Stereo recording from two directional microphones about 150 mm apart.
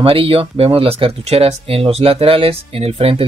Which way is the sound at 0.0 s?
35° right (ahead or behind).